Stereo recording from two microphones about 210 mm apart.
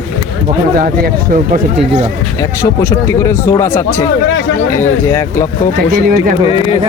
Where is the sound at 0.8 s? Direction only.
40° right (ahead or behind).